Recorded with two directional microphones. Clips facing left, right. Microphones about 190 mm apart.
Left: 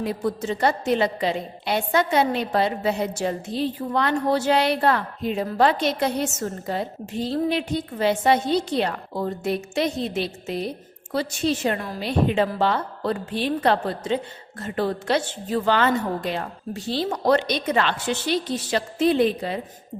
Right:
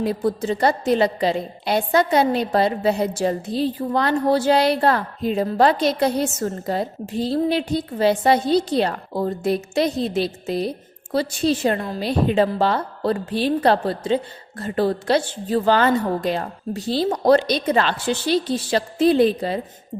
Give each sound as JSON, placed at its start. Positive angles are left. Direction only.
{"t": 0.0, "sound": "a woman's voice", "side_deg": -35}